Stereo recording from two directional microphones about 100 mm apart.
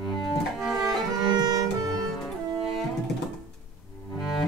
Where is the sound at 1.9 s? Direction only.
5° left (ahead or behind).